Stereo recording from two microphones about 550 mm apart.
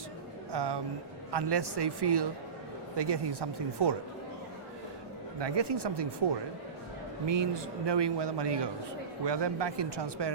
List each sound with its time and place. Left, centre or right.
0.5 s a man's voice: right
5.4 s a man's voice: right